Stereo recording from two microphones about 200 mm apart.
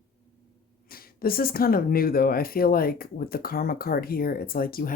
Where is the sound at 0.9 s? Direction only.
50° left (ahead or behind).